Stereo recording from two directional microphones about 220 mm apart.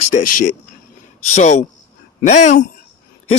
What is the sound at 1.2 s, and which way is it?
A man's voice, 30° left (ahead or behind).